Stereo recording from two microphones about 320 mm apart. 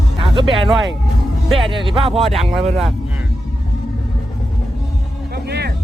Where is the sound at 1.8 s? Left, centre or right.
Centre.